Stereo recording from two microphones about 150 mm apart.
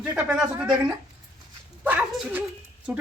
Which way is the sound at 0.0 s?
10° right (ahead or behind).